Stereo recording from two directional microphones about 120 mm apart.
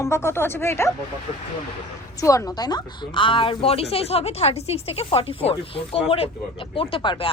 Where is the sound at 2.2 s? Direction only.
25° left (ahead or behind).